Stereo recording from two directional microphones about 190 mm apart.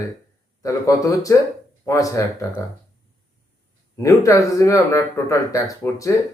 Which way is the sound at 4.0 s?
15° left (ahead or behind).